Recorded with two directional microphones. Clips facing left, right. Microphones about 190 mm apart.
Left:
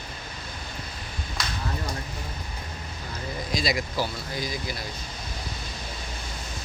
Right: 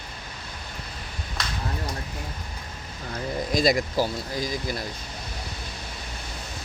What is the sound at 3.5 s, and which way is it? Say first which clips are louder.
Speech: right 5 dB; 50° right (ahead or behind).